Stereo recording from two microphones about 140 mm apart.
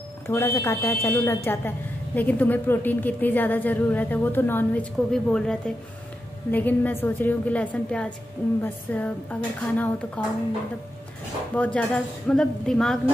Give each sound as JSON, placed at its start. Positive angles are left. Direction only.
{"t": 0.3, "sound": "a woman's voice", "side_deg": 15}
{"t": 11.5, "sound": "a woman's voice", "side_deg": 10}